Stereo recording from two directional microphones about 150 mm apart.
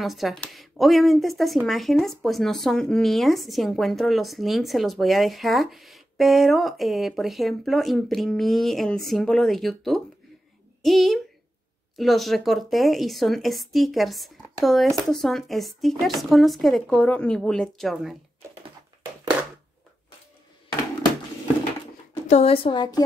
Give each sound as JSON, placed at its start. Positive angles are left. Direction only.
{"t": 0.0, "sound": "a child's voice", "side_deg": 0}
{"t": 22.3, "sound": "a woman's voice", "side_deg": 40}